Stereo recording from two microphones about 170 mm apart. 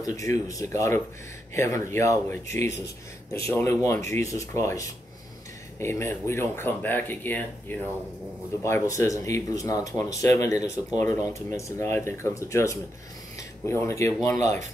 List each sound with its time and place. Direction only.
0.0 s speech: 20° left (ahead or behind)